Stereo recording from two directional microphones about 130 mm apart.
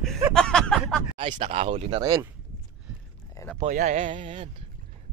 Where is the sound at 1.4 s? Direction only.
50° right (ahead or behind).